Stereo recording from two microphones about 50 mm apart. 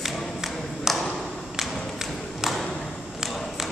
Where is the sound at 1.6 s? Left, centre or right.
Centre.